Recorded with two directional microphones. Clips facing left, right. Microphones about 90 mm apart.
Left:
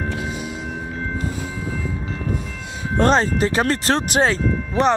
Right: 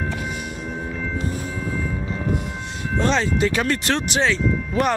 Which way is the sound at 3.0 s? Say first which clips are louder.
Left 3 dB; 40° left (ahead or behind).